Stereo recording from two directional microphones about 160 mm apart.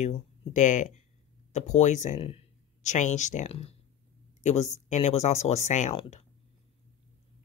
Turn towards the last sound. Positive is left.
turn(degrees=45)  # may be behind; listen again after turning